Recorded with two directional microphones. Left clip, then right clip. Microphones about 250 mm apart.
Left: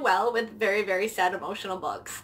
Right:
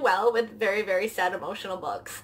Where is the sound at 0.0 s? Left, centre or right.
Centre.